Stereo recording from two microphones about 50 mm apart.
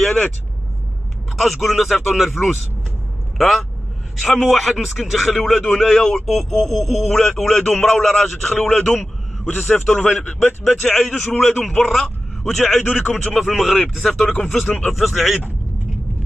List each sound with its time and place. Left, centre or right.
0.0 s speech: centre
1.3 s speech: centre
3.3 s speech: centre
9.5 s speech: centre
10.8 s a man's voice: centre
12.7 s speech: left
13.2 s speech: centre